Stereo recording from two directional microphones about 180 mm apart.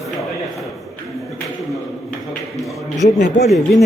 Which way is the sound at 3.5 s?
Centre (ahead or behind).